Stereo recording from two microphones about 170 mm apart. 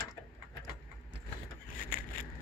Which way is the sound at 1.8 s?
55° left (ahead or behind).